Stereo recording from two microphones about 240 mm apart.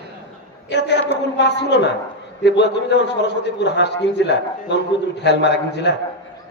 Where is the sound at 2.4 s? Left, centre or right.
Left.